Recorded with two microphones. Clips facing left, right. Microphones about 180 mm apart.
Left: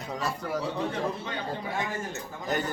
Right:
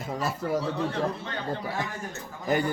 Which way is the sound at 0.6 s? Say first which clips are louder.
Right 2 dB; 15° left (ahead or behind).